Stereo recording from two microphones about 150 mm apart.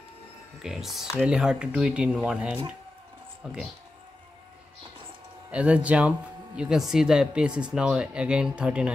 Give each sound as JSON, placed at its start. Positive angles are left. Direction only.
{"t": 0.6, "sound": "speech", "side_deg": 0}
{"t": 5.5, "sound": "speech", "side_deg": -10}